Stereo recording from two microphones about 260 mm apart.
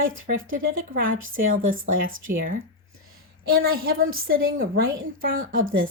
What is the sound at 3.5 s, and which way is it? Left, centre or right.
A woman's voice, right.